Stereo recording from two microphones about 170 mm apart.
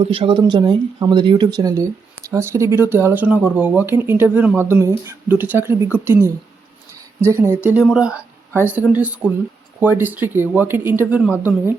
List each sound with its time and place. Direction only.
0.0 s speech: 30° right (ahead or behind); by 11.3 s 10° right (ahead or behind)